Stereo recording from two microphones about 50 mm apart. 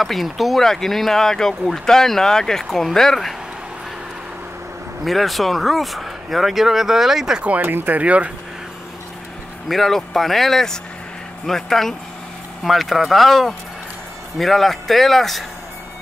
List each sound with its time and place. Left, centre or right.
0.0 s speech: centre
5.0 s speech: centre
7.4 s speech: right
8.0 s speech: right
9.7 s speech: centre